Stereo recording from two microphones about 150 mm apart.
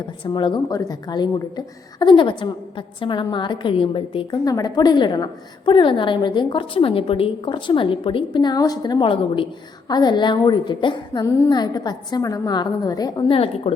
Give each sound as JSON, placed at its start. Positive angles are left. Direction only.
{"t": 0.3, "sound": "a woman's voice", "side_deg": 30}
{"t": 4.4, "sound": "a woman's voice", "side_deg": 25}